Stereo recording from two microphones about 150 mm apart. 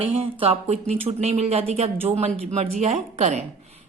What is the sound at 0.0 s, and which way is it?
A woman's voice, 40° right (ahead or behind).